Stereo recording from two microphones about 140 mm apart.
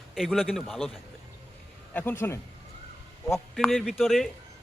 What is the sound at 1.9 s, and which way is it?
Speech, 10° left (ahead or behind).